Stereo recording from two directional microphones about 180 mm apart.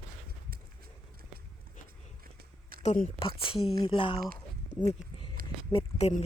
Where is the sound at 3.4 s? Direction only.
30° left (ahead or behind).